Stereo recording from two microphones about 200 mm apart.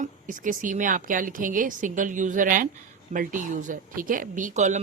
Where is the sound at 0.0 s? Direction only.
40° right (ahead or behind).